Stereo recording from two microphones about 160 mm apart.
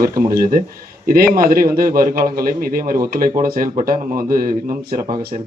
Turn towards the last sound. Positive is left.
turn(degrees=-25)  # may be behind; listen again after turning